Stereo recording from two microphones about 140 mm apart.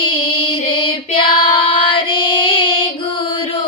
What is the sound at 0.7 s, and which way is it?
Female singing, 40° left (ahead or behind).